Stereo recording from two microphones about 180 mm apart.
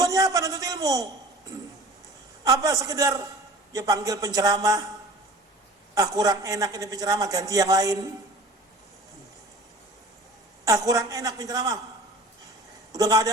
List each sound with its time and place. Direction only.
0.0 s a man's voice: 20° right (ahead or behind)
2.4 s a man's voice: 20° right (ahead or behind)
5.9 s a man's voice: 20° right (ahead or behind)
10.7 s a man's voice: 20° right (ahead or behind)
12.9 s a man's voice: 20° right (ahead or behind)